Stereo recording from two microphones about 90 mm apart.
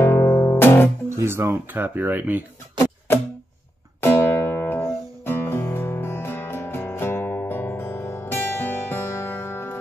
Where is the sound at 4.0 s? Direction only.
25° left (ahead or behind).